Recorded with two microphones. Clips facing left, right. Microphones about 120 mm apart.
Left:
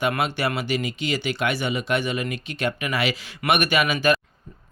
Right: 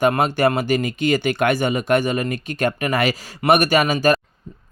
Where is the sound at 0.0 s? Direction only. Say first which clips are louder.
Right 7 dB; 45° right (ahead or behind).